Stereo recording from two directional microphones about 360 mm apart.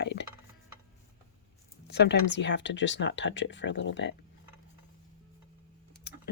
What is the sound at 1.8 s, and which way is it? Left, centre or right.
Speech, left.